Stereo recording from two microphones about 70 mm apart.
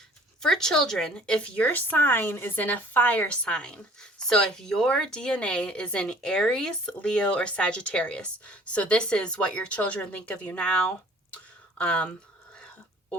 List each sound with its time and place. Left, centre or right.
0.4 s speech: centre
1.6 s speech: left